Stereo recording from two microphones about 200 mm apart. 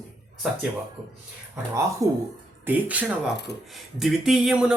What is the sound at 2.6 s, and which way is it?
Speech, 5° right (ahead or behind).